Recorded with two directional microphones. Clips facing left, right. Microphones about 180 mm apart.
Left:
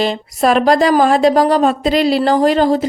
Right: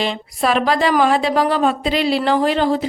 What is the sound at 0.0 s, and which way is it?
A woman's voice, 40° left (ahead or behind).